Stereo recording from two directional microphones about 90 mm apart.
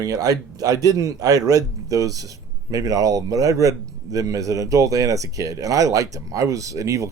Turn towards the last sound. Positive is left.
turn(degrees=-35)  # may be behind; listen again after turning